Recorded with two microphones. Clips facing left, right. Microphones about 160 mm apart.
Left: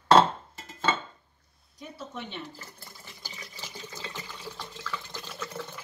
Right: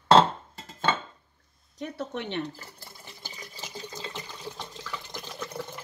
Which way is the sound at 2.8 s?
20° right (ahead or behind).